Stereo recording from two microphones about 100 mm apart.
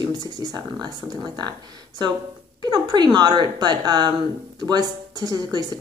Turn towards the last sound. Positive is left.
turn(degrees=-40)  # may be behind; listen again after turning